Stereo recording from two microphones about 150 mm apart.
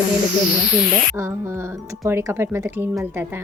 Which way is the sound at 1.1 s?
20° right (ahead or behind).